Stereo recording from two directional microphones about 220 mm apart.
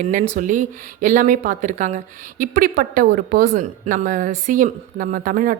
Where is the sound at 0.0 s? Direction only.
35° right (ahead or behind).